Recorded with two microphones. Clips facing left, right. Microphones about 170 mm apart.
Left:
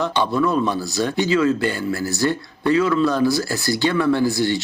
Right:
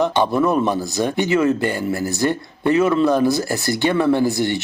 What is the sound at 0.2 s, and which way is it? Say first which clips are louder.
A man's voice: left 1 dB; 20° right (ahead or behind).